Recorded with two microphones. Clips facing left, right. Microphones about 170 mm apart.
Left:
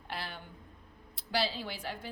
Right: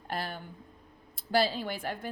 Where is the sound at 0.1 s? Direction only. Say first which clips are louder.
Right 6 dB; 45° right (ahead or behind).